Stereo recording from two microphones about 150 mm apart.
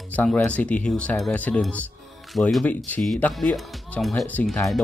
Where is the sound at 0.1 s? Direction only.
10° left (ahead or behind).